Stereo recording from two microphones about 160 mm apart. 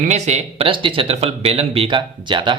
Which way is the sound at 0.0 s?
45° right (ahead or behind).